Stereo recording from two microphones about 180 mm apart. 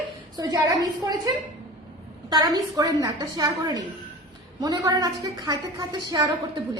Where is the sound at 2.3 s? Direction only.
20° right (ahead or behind).